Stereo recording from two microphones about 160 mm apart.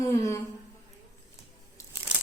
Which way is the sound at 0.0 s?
20° left (ahead or behind).